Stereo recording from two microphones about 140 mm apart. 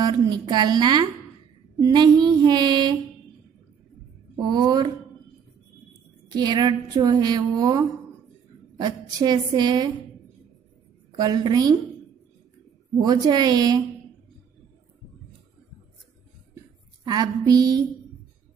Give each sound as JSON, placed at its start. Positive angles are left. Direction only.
{"t": 0.0, "sound": "a sound", "side_deg": -30}
{"t": 4.4, "sound": "a woman's voice", "side_deg": -30}
{"t": 6.2, "sound": "a woman's voice", "side_deg": -30}
{"t": 8.7, "sound": "a sound", "side_deg": -30}
{"t": 11.1, "sound": "a woman's voice", "side_deg": -30}
{"t": 12.9, "sound": "a woman's voice", "side_deg": -30}
{"t": 17.0, "sound": "a woman's voice", "side_deg": -30}